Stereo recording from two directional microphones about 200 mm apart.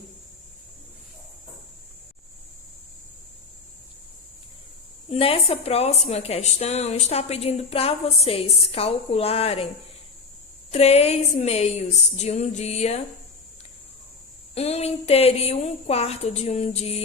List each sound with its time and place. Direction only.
5.0 s a woman's voice: 30° left (ahead or behind)
10.7 s a woman's voice: 30° left (ahead or behind)
14.5 s a woman's voice: 30° left (ahead or behind)